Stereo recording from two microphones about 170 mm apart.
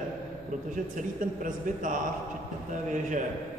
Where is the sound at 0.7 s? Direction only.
50° right (ahead or behind).